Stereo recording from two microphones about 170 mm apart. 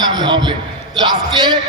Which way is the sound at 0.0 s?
25° right (ahead or behind).